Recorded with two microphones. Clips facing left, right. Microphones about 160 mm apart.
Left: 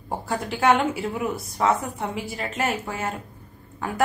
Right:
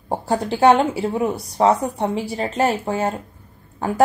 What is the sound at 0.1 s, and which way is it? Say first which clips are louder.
A woman's voice: right 6 dB; 30° right (ahead or behind).